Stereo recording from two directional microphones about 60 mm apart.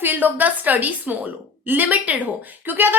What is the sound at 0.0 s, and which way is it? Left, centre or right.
A woman's voice, right.